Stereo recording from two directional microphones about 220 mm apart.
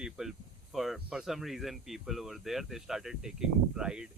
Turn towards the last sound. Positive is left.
turn(degrees=-5)  # may be behind; listen again after turning